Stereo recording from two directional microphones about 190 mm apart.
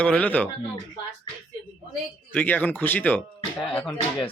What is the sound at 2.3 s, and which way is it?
Speech, 10° left (ahead or behind).